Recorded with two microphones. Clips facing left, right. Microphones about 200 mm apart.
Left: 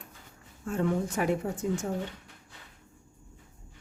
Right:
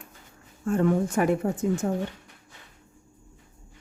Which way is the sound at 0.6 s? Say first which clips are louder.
Right 6 dB; 55° right (ahead or behind).